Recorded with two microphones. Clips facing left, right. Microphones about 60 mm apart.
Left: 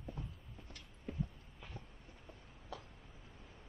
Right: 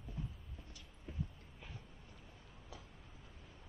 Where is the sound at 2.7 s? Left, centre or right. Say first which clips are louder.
Left 7 dB; left.